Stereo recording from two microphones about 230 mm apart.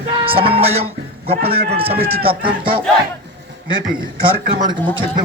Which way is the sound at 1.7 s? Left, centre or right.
Right.